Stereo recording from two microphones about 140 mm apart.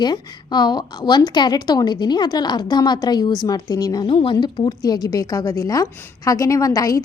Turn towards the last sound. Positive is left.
turn(degrees=25)  # may be behind; listen again after turning